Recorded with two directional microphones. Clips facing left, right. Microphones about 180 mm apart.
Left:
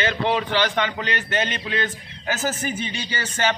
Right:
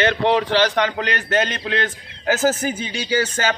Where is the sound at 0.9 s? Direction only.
40° right (ahead or behind).